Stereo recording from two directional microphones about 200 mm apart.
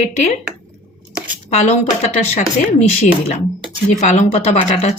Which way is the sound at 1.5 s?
35° left (ahead or behind).